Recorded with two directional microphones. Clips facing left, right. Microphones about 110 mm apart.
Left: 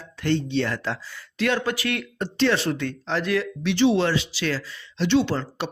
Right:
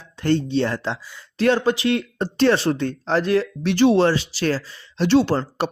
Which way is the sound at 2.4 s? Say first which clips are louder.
Right 4 dB; 35° right (ahead or behind).